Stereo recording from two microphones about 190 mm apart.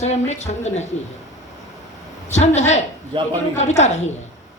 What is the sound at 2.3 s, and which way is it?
Speech, 35° left (ahead or behind).